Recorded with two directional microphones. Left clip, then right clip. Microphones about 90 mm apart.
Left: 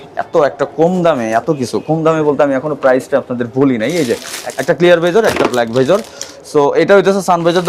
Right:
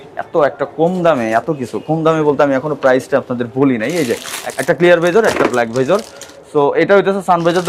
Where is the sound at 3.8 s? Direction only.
Centre (ahead or behind); by 6.0 s 25° left (ahead or behind).